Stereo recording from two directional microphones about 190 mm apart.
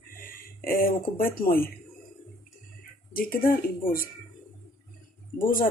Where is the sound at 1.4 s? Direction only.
50° left (ahead or behind).